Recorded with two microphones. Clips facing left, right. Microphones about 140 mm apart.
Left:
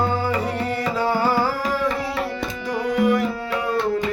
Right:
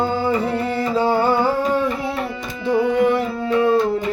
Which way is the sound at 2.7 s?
25° right (ahead or behind).